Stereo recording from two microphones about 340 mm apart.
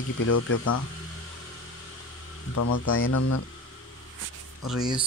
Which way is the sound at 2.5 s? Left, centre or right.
Left.